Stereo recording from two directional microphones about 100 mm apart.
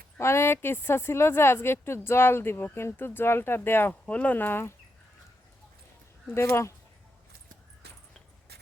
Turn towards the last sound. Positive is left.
turn(degrees=30)  # may be behind; listen again after turning